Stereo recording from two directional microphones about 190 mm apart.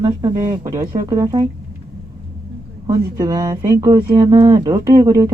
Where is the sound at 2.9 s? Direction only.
20° right (ahead or behind).